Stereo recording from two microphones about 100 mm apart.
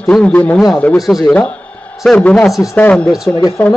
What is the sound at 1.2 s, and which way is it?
A man's voice, 10° left (ahead or behind).